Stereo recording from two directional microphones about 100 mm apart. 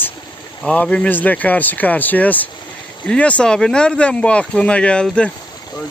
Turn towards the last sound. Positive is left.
turn(degrees=10)  # may be behind; listen again after turning